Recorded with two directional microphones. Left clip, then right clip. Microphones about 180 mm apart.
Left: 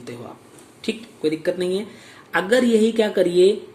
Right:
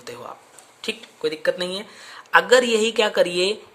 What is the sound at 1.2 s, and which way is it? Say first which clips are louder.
Speech: left 1 dB; 50° right (ahead or behind).